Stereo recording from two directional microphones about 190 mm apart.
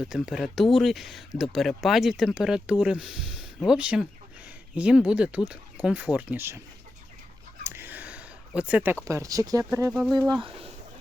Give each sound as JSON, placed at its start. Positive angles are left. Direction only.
{"t": 0.0, "sound": "speech", "side_deg": -5}
{"t": 7.6, "sound": "a sound", "side_deg": -10}
{"t": 9.0, "sound": "speech", "side_deg": -15}